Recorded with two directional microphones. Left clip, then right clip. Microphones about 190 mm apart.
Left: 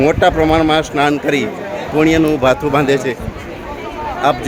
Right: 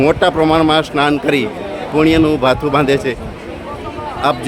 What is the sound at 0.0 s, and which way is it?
A man's voice, 10° right (ahead or behind).